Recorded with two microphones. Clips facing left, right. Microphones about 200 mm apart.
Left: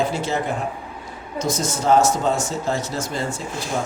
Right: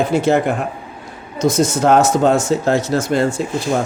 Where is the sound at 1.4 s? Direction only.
80° right.